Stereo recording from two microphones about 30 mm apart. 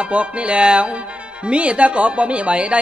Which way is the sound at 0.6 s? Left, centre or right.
Right.